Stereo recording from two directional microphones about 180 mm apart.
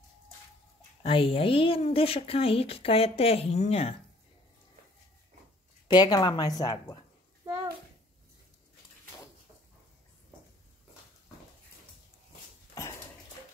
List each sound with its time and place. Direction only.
1.0 s speech: 30° left (ahead or behind)
5.9 s speech: 20° left (ahead or behind)